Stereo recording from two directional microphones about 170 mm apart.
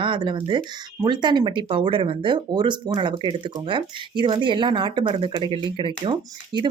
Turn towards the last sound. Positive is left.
turn(degrees=-25)  # may be behind; listen again after turning